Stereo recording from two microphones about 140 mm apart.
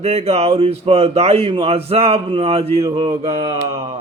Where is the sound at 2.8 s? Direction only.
30° right (ahead or behind).